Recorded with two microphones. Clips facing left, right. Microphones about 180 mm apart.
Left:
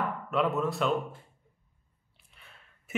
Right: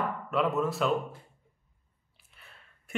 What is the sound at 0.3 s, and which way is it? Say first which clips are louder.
Speech: even; centre (ahead or behind).